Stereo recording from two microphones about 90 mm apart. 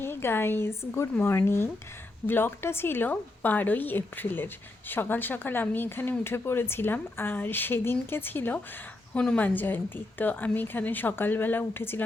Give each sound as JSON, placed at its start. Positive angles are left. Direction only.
{"t": 0.0, "sound": "a woman's voice", "side_deg": 25}